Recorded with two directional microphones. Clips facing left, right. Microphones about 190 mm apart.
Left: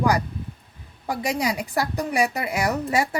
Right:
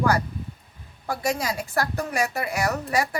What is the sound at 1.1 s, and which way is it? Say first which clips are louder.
A woman's voice: left 2 dB; 15° left (ahead or behind).